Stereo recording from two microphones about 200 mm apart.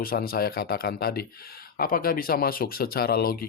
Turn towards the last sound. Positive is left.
turn(degrees=50)  # may be behind; listen again after turning